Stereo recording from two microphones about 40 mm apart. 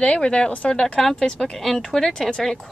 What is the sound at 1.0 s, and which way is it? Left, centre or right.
A woman's voice, centre.